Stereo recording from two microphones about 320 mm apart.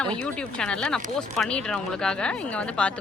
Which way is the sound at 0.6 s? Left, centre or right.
Centre.